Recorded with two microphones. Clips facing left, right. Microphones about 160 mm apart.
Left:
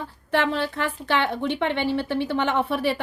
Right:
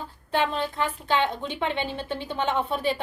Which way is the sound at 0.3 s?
85° left.